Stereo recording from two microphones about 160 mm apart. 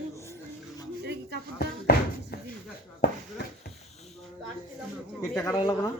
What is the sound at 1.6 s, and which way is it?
Music, 70° left (ahead or behind).